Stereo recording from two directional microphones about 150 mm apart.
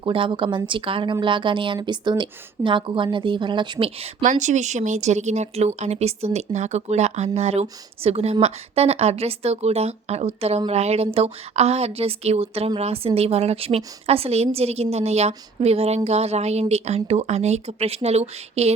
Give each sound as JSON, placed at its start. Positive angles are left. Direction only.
{"t": 0.0, "sound": "a woman's voice", "side_deg": -35}
{"t": 4.2, "sound": "speech", "side_deg": -55}